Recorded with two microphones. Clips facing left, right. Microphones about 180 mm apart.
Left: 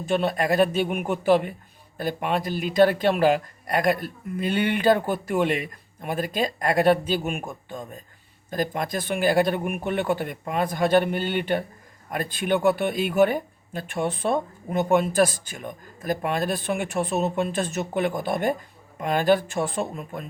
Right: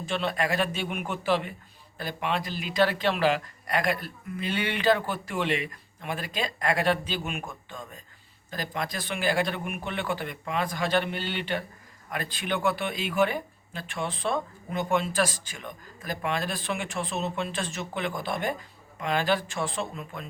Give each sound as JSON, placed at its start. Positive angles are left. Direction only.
{"t": 0.1, "sound": "speech", "side_deg": 45}